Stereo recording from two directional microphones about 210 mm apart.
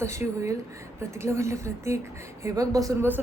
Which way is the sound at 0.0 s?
15° right (ahead or behind).